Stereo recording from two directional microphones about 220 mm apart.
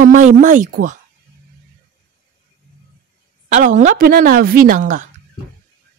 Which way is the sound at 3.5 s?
35° right (ahead or behind).